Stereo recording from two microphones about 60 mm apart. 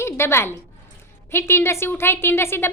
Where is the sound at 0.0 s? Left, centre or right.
Left.